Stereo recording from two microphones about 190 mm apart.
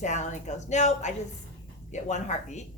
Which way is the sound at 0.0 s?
40° left (ahead or behind).